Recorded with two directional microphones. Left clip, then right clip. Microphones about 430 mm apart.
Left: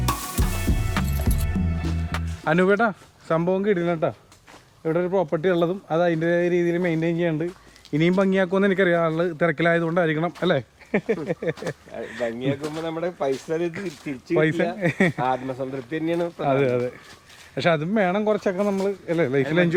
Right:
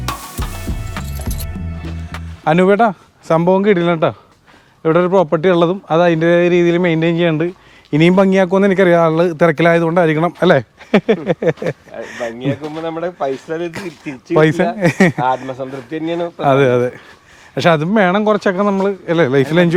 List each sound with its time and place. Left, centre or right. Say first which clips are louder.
0.1 s music: right 3 dB; centre
2.4 s a man's voice: right 8 dB; right
10.9 s speech: right 10 dB; right
12.4 s speech: right 6 dB; right
14.3 s a man's voice: right 9 dB; right
15.1 s speech: right 7 dB; right
16.4 s speech: right 11 dB; right